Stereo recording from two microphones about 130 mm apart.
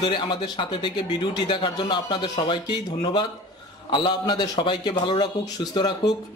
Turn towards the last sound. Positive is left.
turn(degrees=35)  # may be behind; listen again after turning